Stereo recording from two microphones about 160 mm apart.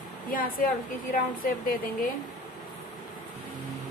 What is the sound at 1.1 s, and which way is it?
Speech, 60° left (ahead or behind).